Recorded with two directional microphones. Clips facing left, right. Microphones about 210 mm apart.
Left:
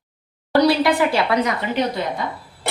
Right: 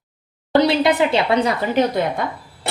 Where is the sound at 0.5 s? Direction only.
20° right (ahead or behind).